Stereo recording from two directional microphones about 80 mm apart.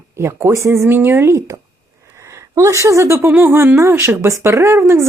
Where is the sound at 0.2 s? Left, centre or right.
Right.